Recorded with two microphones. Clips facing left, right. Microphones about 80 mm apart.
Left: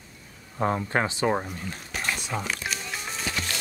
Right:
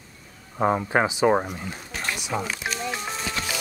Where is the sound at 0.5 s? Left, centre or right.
Centre.